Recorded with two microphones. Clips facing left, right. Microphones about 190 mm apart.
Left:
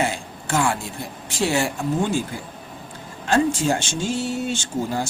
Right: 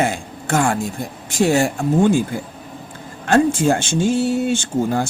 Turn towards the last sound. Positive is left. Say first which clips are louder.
# right 5 dB
turn(degrees=-55)  # may be behind; listen again after turning